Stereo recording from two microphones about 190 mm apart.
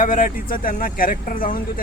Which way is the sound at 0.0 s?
45° left (ahead or behind).